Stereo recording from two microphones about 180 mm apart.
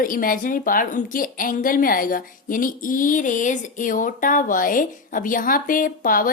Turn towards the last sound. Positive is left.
turn(degrees=50)  # may be behind; listen again after turning